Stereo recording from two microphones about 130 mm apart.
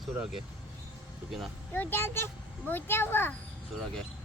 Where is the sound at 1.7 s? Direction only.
15° left (ahead or behind).